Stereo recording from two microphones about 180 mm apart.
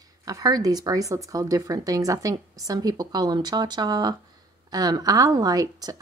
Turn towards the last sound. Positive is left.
turn(degrees=-20)  # may be behind; listen again after turning